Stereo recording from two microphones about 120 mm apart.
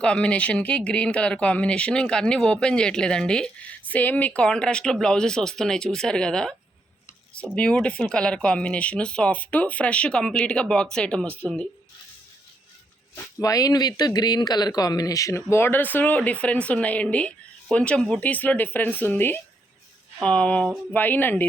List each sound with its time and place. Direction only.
0.0 s speech: 10° left (ahead or behind)
13.1 s speech: 30° left (ahead or behind)